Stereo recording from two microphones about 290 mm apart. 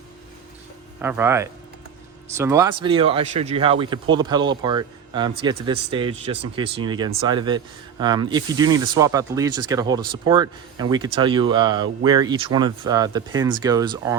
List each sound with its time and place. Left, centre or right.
1.0 s speech: centre